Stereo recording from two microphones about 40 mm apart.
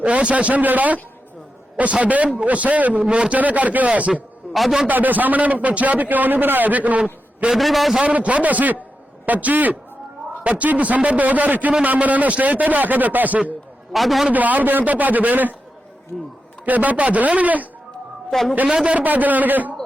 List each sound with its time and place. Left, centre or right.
0.0 s a man's voice: right
1.8 s a man's voice: right
3.1 s a man's voice: right
3.3 s a man's voice: right
4.4 s a sound: centre
4.9 s a man's voice: right
7.5 s a man's voice: centre
8.0 s a man's voice: right
13.9 s a man's voice: centre
14.3 s a man's voice: right
16.1 s a sound: centre
16.6 s a man's voice: right
18.3 s a man's voice: centre
18.9 s a man's voice: right